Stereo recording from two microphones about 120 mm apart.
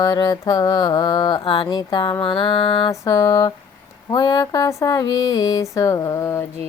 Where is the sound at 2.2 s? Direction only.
40° left (ahead or behind).